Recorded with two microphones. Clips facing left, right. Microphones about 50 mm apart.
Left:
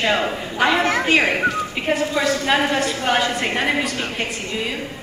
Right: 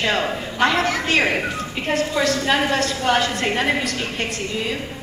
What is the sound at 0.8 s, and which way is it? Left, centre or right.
A woman's voice, left.